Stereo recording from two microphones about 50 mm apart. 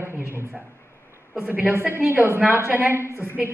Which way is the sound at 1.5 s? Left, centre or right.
Right.